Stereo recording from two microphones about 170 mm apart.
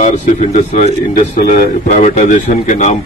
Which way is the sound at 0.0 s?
45° left (ahead or behind).